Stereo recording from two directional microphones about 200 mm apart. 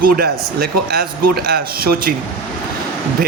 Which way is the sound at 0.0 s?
50° right (ahead or behind).